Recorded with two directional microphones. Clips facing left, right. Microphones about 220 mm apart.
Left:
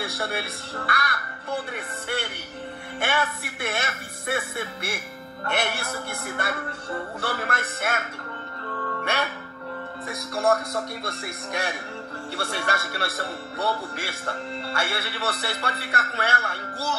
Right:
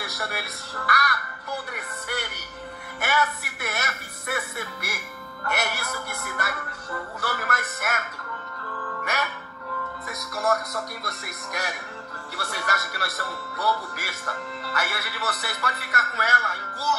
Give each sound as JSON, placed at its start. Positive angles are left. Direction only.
{"t": 0.0, "sound": "speech", "side_deg": 25}
{"t": 9.0, "sound": "music", "side_deg": 30}
{"t": 10.0, "sound": "speech", "side_deg": 30}